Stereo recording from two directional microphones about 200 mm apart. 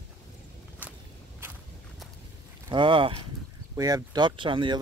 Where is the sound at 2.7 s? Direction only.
25° right (ahead or behind).